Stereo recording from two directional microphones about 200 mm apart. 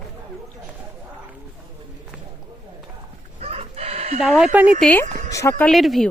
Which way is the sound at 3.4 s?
30° right (ahead or behind).